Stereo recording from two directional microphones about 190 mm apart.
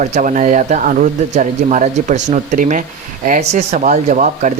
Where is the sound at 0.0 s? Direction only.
40° right (ahead or behind).